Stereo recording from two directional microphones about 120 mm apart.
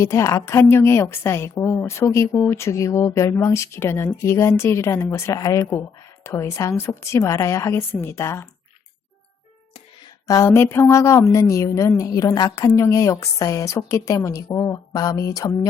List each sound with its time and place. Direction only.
0.0 s a woman's voice: 25° left (ahead or behind)
10.2 s a woman's voice: 25° left (ahead or behind)